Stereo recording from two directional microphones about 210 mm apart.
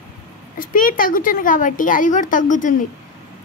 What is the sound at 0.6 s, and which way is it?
A woman's voice, 40° left (ahead or behind).